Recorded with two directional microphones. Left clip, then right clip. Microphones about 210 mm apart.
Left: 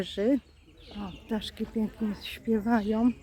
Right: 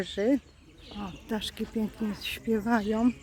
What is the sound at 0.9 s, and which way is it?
Speech, 15° right (ahead or behind).